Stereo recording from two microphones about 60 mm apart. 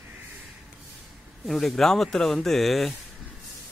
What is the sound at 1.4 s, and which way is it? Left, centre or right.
Speech, centre.